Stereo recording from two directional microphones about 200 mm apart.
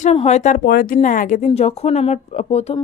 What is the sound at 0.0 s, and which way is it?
Speech, 30° left (ahead or behind).